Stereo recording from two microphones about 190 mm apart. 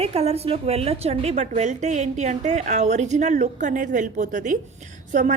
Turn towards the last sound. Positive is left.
turn(degrees=-40)  # may be behind; listen again after turning